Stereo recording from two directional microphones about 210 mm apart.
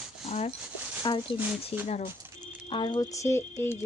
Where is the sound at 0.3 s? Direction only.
30° left (ahead or behind).